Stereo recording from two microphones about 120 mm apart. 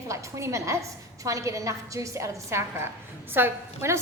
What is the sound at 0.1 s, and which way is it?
A woman's voice, 25° right (ahead or behind).